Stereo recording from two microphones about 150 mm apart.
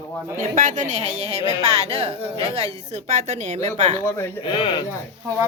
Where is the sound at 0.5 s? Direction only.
60° right (ahead or behind).